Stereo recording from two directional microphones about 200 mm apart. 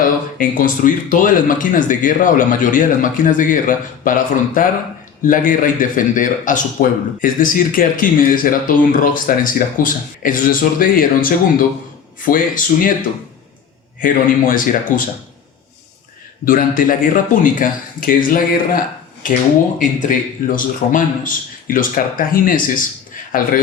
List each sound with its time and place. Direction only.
0.0 s a man's voice: 45° left (ahead or behind)
14.0 s a man's voice: 45° left (ahead or behind)
16.5 s a man's voice: 45° left (ahead or behind)
19.8 s a man's voice: 40° left (ahead or behind)